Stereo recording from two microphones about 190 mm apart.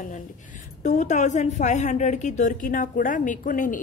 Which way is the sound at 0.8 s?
40° left (ahead or behind).